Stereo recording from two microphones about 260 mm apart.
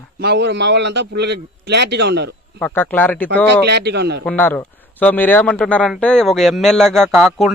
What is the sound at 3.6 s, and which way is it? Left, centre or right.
Speech, right.